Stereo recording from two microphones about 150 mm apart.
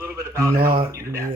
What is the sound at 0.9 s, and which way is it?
Speech, 20° right (ahead or behind).